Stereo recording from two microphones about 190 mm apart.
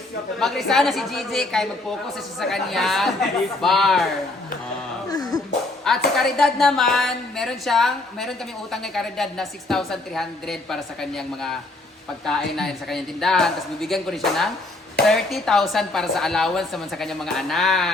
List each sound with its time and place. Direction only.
0.3 s a woman's voice: centre (ahead or behind)
5.1 s dog: 20° left (ahead or behind)
6.1 s a woman's voice: centre (ahead or behind)